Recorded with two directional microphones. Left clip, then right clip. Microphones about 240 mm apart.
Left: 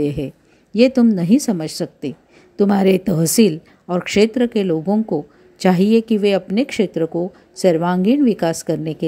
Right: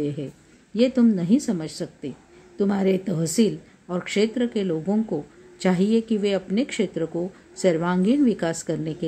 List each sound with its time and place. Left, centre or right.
0.0 s a woman's voice: left